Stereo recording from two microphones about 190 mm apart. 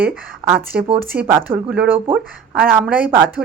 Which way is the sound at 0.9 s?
10° right (ahead or behind).